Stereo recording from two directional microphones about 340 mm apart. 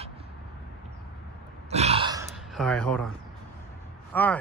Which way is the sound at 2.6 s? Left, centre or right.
Centre.